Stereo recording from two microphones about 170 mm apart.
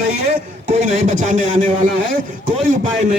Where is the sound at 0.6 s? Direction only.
45° right (ahead or behind).